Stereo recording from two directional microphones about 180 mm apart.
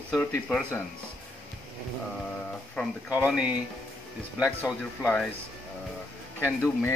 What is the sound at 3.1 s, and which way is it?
Speech, 5° right (ahead or behind).